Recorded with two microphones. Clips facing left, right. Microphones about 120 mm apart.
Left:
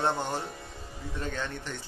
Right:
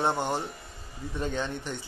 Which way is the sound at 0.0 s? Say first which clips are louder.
Right 2 dB; 15° right (ahead or behind).